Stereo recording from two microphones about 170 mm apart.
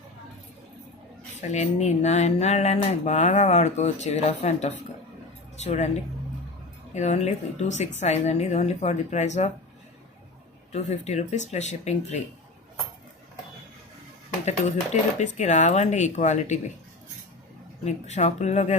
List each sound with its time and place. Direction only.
1.4 s speech: 45° left (ahead or behind)
10.7 s speech: 40° left (ahead or behind)
14.9 s speech: 40° left (ahead or behind)
17.8 s speech: 40° left (ahead or behind)